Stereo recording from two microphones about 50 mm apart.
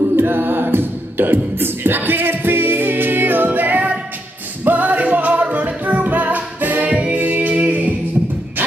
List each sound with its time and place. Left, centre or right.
0.1 s music: right
7.2 s music: right